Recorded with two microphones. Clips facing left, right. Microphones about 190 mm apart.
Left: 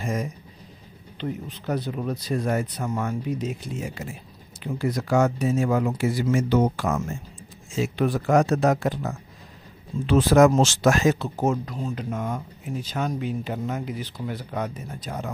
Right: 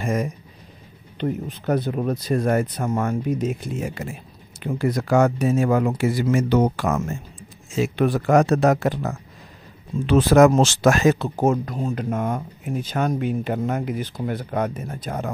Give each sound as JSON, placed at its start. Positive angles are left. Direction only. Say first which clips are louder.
{"t": 0.0, "sound": "speech", "louder": "right 4 dB", "side_deg": -60}